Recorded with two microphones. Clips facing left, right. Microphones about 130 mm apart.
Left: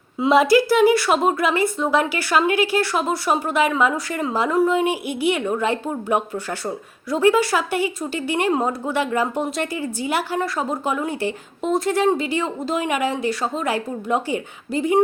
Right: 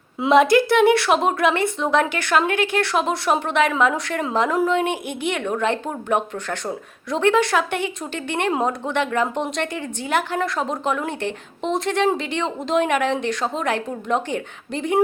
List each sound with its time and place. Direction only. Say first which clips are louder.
0.2 s a woman's voice: even; centre (ahead or behind)